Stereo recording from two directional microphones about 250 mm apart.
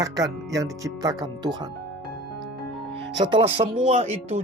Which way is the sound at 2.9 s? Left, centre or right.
Centre.